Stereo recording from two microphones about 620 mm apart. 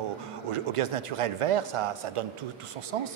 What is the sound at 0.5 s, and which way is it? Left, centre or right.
A man's voice, right.